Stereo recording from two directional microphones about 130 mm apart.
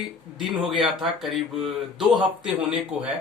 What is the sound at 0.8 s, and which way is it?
Speech, centre (ahead or behind).